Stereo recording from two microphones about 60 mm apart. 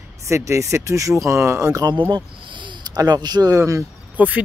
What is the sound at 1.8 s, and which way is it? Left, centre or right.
Speech, right.